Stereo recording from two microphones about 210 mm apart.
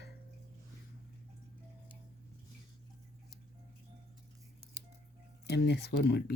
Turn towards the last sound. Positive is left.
turn(degrees=50)  # may be behind; listen again after turning